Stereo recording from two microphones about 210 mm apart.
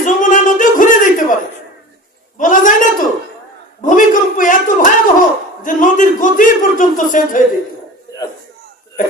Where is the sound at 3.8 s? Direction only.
40° left (ahead or behind).